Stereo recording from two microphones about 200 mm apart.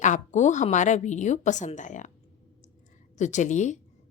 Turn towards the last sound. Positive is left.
turn(degrees=35)  # may be behind; listen again after turning